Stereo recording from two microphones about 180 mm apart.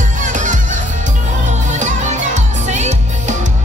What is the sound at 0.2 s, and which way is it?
Music, 45° right (ahead or behind).